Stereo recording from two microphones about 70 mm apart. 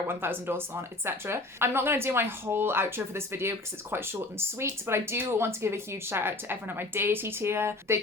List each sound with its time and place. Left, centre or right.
0.1 s speech: right